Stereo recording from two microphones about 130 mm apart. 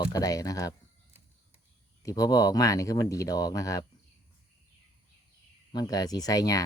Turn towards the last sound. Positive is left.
turn(degrees=30)  # may be behind; listen again after turning